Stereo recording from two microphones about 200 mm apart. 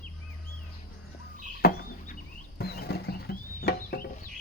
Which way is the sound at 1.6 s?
50° left (ahead or behind).